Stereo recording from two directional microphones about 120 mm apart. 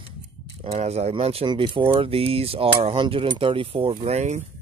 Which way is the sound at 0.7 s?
60° right (ahead or behind).